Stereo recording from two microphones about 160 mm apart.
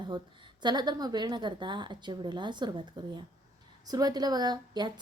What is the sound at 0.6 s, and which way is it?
A woman's voice, 25° right (ahead or behind).